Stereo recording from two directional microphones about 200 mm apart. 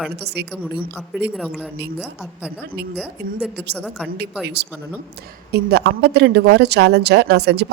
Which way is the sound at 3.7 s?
5° left (ahead or behind).